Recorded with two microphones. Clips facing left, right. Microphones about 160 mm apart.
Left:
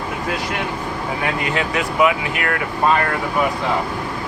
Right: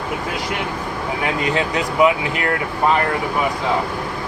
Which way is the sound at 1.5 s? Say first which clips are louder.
Even; 25° right (ahead or behind).